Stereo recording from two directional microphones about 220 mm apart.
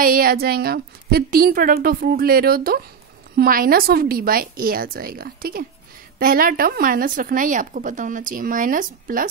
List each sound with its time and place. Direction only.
0.0 s a woman's voice: 40° right (ahead or behind)